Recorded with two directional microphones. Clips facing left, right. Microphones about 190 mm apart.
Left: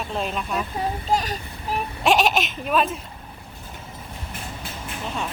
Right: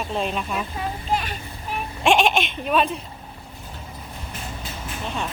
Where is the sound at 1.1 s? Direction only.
40° left (ahead or behind).